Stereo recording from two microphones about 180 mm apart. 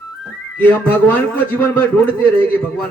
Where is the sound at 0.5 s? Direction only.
10° left (ahead or behind).